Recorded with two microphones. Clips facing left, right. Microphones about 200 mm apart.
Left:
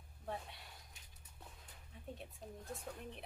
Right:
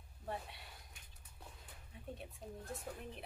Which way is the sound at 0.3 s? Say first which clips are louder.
Right 1 dB; centre (ahead or behind).